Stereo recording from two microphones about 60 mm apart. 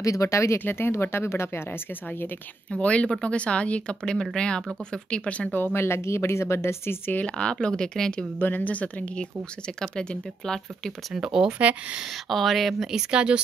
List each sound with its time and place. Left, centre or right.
0.0 s speech: left
0.7 s a woman's voice: left
2.7 s speech: centre
5.5 s a woman's voice: left
7.1 s speech: left
8.4 s speech: left; by 10.6 s centre
11.1 s speech: centre
11.5 s speech: right
12.3 s speech: centre